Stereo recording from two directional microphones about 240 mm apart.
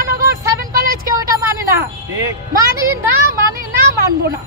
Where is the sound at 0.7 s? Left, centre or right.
Right.